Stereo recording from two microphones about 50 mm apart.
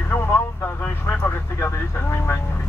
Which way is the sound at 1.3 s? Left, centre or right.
Left.